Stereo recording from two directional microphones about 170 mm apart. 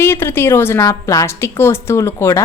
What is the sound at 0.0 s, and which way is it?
A woman's voice, 15° left (ahead or behind).